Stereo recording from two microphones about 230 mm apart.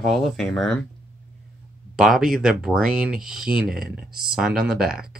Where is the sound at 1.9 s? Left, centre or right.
Centre.